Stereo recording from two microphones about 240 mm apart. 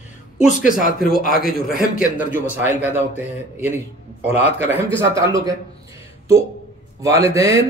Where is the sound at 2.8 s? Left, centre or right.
Centre.